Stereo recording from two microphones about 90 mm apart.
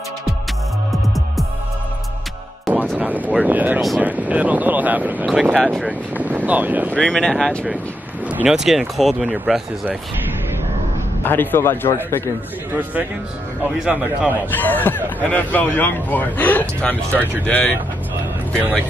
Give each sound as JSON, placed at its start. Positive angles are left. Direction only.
{"t": 2.7, "sound": "vehicle", "side_deg": -15}
{"t": 5.5, "sound": "speech", "side_deg": 5}
{"t": 5.9, "sound": "speech", "side_deg": -20}
{"t": 6.9, "sound": "speech", "side_deg": 10}
{"t": 11.2, "sound": "a man's voice", "side_deg": 25}
{"t": 13.7, "sound": "speech", "side_deg": -15}
{"t": 14.5, "sound": "a man's voice", "side_deg": 20}